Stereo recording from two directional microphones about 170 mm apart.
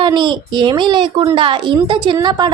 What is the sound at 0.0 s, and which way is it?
A woman's voice, 25° right (ahead or behind).